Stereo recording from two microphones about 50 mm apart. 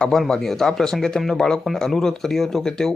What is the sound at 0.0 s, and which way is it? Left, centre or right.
Speech, centre.